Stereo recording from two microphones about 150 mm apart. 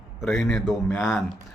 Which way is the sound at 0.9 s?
15° left (ahead or behind).